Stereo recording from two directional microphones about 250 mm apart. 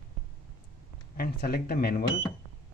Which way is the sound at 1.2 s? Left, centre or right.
Left.